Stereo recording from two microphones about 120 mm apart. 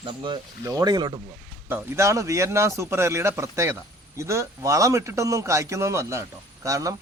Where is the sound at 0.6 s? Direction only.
30° right (ahead or behind).